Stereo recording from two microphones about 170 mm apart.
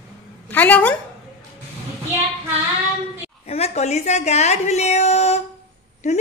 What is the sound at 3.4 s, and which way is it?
A woman's voice, 40° left (ahead or behind).